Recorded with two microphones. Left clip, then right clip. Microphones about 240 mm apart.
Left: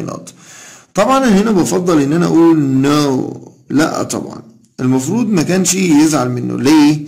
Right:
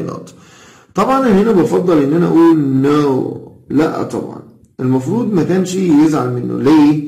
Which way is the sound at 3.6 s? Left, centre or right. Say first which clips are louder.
Even; left.